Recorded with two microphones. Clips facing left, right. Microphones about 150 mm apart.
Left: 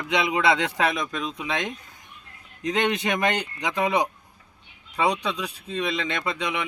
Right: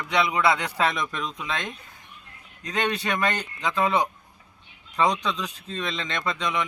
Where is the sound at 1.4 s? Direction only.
15° left (ahead or behind).